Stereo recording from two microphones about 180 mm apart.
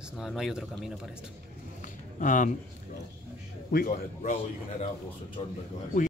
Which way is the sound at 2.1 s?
45° left (ahead or behind).